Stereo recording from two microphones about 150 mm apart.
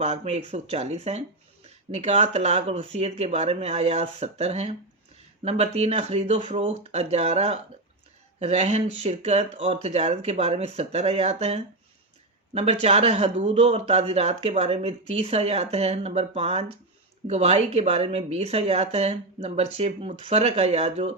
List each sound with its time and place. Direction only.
0.0 s speech: 45° right (ahead or behind)